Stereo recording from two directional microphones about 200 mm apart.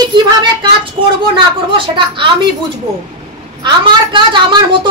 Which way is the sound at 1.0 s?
25° right (ahead or behind).